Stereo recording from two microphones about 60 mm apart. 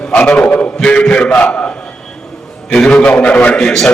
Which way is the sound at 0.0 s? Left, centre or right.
Centre.